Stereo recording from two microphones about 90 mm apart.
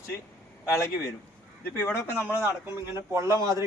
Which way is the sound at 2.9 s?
35° right (ahead or behind).